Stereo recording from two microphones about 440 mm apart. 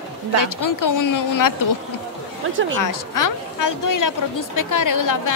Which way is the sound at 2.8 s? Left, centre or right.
Left.